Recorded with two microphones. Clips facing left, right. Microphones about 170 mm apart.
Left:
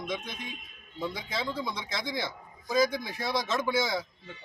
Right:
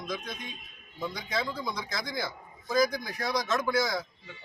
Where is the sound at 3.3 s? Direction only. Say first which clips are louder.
Right 1 dB; 25° left (ahead or behind).